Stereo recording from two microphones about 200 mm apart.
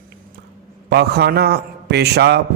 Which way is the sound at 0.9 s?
55° right (ahead or behind).